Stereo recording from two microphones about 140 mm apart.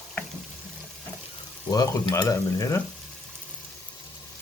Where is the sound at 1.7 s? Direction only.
25° left (ahead or behind).